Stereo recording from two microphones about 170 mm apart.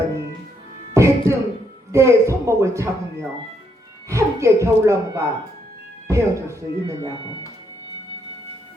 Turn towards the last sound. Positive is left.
turn(degrees=-20)  # may be behind; listen again after turning